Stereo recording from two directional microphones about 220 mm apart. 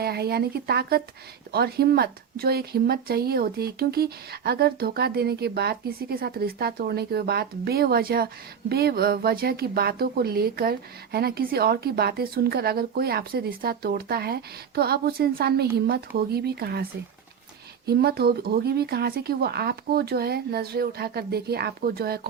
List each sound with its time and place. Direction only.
0.0 s a woman's voice: 45° right (ahead or behind)
17.8 s a woman's voice: 45° right (ahead or behind)